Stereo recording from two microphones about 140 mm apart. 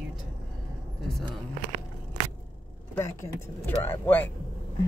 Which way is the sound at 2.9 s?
20° left (ahead or behind).